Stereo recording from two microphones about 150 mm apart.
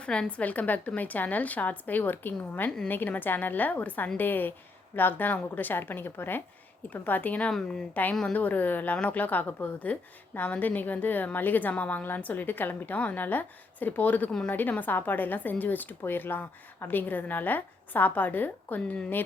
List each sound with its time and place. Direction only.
0.0 s a woman's voice: 5° left (ahead or behind)